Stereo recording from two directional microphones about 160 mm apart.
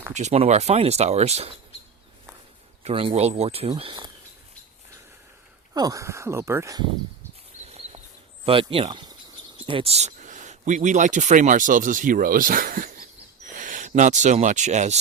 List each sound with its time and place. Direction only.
0.1 s speech: 45° right (ahead or behind)
2.8 s speech: 35° right (ahead or behind)
3.8 s speech: 30° right (ahead or behind)
5.7 s speech: 20° right (ahead or behind)
7.6 s a sound: 40° right (ahead or behind)
8.4 s speech: 35° right (ahead or behind)